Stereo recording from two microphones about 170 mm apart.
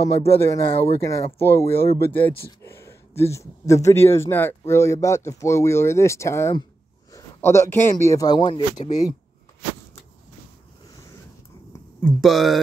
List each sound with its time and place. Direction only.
0.0 s a man's voice: 15° left (ahead or behind)
12.0 s speech: centre (ahead or behind)